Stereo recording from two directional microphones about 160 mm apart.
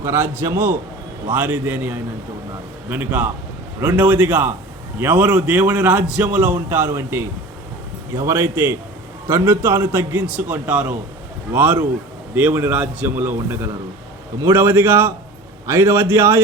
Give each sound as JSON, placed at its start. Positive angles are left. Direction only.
{"t": 0.0, "sound": "a man's voice", "side_deg": -15}